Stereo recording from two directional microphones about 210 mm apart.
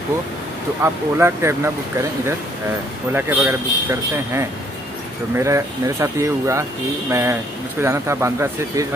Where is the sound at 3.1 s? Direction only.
10° right (ahead or behind).